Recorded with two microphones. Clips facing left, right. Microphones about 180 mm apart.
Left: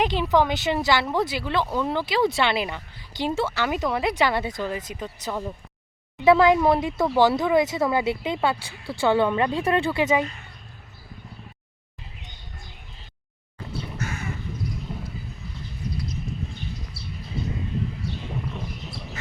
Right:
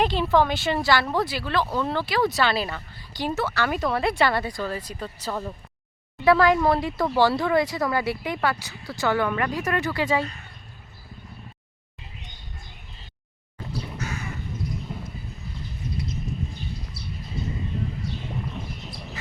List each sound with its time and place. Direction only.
0.0 s speech: 15° left (ahead or behind)
14.8 s horse: centre (ahead or behind)